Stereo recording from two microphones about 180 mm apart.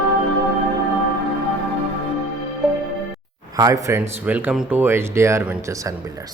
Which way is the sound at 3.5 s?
20° right (ahead or behind).